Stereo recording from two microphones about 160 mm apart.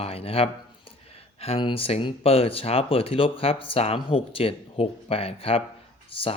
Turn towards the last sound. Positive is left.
turn(degrees=35)  # may be behind; listen again after turning